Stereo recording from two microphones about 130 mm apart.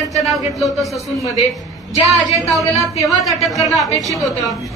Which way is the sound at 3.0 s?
Centre (ahead or behind).